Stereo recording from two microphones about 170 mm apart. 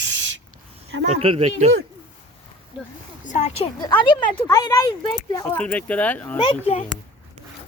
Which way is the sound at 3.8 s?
25° left (ahead or behind).